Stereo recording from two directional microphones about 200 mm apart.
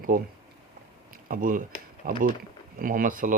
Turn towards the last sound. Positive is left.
turn(degrees=-45)  # may be behind; listen again after turning